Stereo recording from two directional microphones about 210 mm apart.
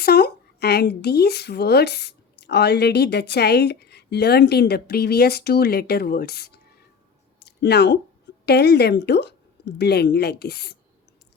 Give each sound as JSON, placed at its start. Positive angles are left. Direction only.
{"t": 0.0, "sound": "a woman's voice", "side_deg": 50}